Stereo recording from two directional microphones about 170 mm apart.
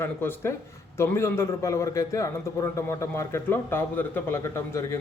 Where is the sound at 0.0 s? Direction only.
15° left (ahead or behind).